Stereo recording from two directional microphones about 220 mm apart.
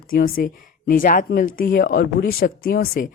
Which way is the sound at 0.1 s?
40° left (ahead or behind).